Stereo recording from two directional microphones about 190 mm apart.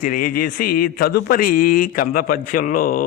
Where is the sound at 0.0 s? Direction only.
45° left (ahead or behind).